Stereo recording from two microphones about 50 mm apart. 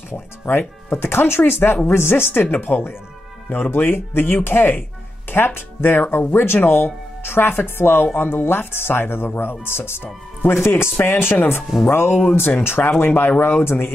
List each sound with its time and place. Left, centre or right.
0.1 s speech: left
2.7 s speech: left